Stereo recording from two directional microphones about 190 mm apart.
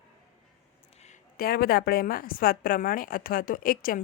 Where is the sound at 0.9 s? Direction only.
35° left (ahead or behind).